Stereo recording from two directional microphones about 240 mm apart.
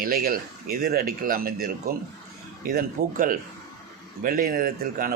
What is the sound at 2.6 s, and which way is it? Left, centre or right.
A man's voice, right.